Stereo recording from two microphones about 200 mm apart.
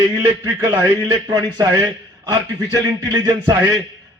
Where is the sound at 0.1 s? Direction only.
20° right (ahead or behind).